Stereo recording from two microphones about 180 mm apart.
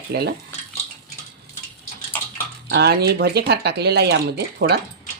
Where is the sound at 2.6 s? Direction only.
65° right (ahead or behind).